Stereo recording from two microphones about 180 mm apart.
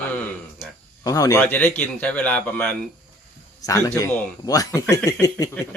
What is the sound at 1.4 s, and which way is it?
Speech, 10° left (ahead or behind).